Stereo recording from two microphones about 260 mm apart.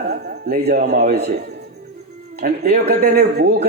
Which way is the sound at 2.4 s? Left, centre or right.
Right.